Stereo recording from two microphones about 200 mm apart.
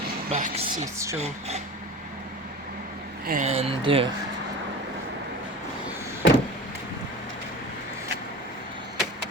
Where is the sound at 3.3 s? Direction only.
35° right (ahead or behind).